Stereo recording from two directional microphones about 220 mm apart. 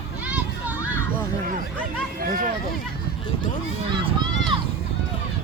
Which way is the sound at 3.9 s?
20° right (ahead or behind).